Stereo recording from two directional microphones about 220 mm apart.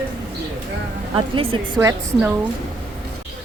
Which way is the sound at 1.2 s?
25° right (ahead or behind).